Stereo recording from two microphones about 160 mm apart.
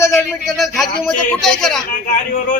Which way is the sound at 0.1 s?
Centre (ahead or behind).